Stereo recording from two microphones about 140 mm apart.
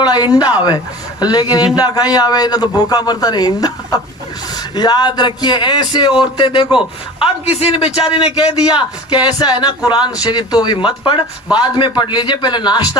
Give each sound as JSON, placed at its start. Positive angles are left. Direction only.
{"t": 0.0, "sound": "a sound", "side_deg": 30}
{"t": 0.3, "sound": "a man's voice", "side_deg": 30}
{"t": 9.2, "sound": "speech", "side_deg": 30}